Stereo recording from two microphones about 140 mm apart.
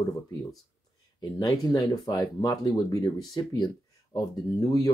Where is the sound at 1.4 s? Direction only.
30° left (ahead or behind).